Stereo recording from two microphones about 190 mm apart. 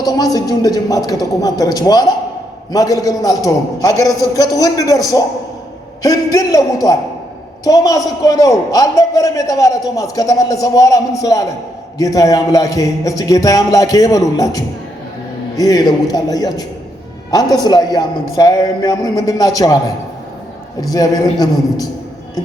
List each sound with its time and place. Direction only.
0.0 s a man's voice: 20° left (ahead or behind)
20.9 s a man's voice: 20° left (ahead or behind)